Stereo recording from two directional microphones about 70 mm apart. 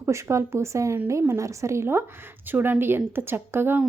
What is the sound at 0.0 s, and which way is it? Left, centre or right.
Speech, right.